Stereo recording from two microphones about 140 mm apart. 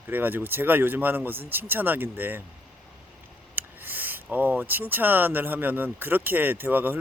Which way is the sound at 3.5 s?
15° right (ahead or behind).